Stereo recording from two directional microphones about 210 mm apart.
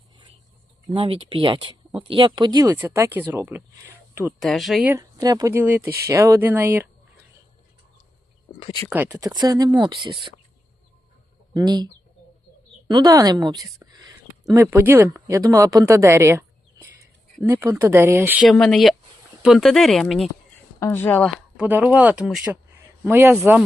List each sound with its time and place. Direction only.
0.9 s speech: 25° right (ahead or behind)
4.4 s speech: centre (ahead or behind)
8.5 s speech: 25° left (ahead or behind)
8.9 s speech: 10° right (ahead or behind)
11.5 s speech: 20° right (ahead or behind)
12.9 s speech: 20° right (ahead or behind); by 20.3 s centre (ahead or behind)
20.7 s speech: 10° left (ahead or behind)